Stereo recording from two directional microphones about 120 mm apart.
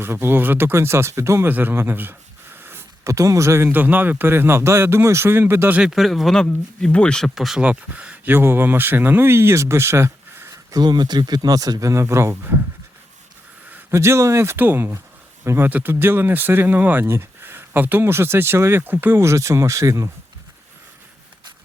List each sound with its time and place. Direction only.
0.0 s speech: 20° right (ahead or behind)
13.7 s speech: 20° right (ahead or behind)